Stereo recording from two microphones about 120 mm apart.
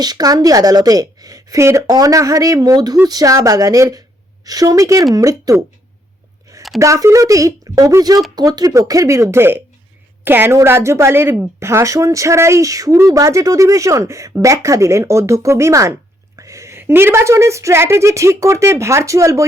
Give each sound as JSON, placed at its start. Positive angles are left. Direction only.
{"t": 0.0, "sound": "a woman's voice", "side_deg": -35}
{"t": 6.7, "sound": "speech", "side_deg": -25}